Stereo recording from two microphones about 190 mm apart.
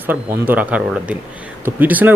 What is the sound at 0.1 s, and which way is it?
Speech, 10° right (ahead or behind).